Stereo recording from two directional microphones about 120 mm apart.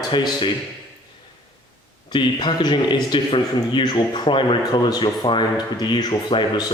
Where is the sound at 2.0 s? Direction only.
40° left (ahead or behind).